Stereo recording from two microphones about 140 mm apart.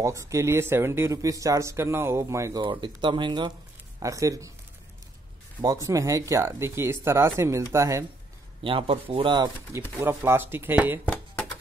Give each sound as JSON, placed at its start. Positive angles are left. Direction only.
{"t": 0.0, "sound": "speech", "side_deg": -20}
{"t": 2.6, "sound": "speech", "side_deg": -35}
{"t": 4.0, "sound": "speech", "side_deg": -25}
{"t": 5.6, "sound": "speech", "side_deg": -25}
{"t": 8.6, "sound": "speech", "side_deg": -40}
{"t": 9.9, "sound": "speech", "side_deg": -15}